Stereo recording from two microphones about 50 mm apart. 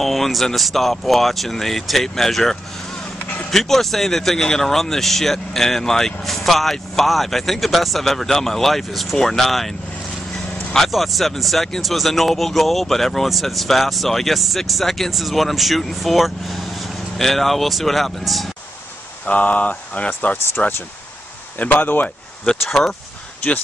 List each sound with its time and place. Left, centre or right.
0.0 s speech: centre
10.9 s speech: centre
19.2 s speech: left
21.5 s speech: left
22.6 s speech: centre